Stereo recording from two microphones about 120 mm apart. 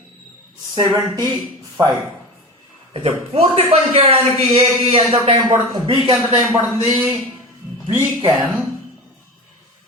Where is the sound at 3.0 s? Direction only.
55° right (ahead or behind).